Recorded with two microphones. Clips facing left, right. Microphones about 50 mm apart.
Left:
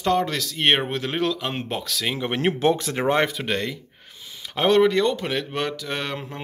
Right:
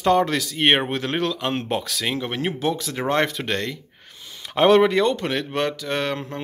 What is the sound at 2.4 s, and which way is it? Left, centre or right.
Speech, left.